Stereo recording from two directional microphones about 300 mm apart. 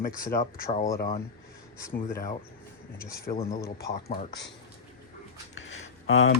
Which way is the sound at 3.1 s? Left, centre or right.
Centre.